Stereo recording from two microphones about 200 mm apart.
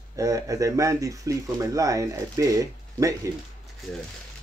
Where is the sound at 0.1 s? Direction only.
15° right (ahead or behind).